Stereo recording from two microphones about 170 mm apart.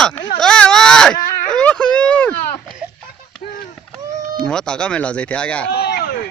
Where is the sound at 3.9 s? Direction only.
5° left (ahead or behind).